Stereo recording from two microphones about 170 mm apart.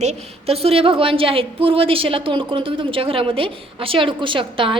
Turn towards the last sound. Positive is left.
turn(degrees=-30)  # may be behind; listen again after turning